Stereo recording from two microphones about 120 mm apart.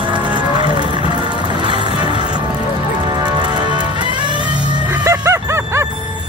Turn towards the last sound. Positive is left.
turn(degrees=-25)  # may be behind; listen again after turning